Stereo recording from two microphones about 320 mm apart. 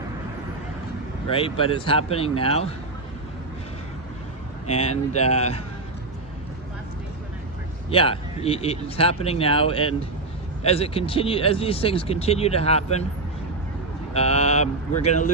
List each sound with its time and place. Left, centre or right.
1.3 s speech: centre
4.6 s speech: centre
7.9 s speech: centre
14.1 s speech: centre